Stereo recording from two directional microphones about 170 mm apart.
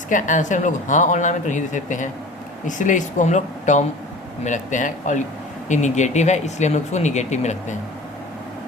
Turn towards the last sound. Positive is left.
turn(degrees=40)  # may be behind; listen again after turning